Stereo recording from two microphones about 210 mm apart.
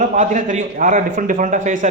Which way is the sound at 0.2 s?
35° right (ahead or behind).